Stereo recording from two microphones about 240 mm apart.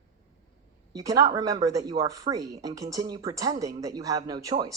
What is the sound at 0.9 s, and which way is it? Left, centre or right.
Speech, centre.